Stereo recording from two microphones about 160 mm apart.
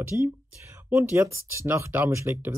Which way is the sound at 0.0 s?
15° right (ahead or behind).